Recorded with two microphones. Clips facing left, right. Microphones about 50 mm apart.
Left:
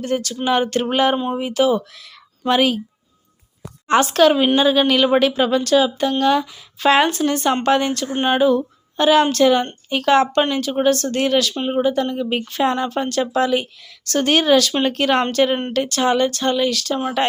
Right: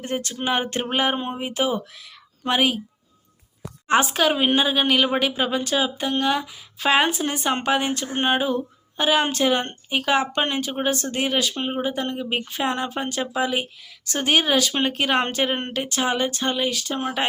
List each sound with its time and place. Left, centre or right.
0.0 s a woman's voice: right
3.8 s speech: centre
10.5 s speech: right